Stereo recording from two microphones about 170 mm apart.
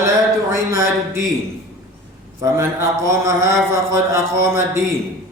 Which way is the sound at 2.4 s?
15° right (ahead or behind).